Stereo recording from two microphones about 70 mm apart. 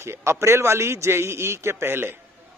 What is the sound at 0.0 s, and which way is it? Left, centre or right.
A man's voice, right.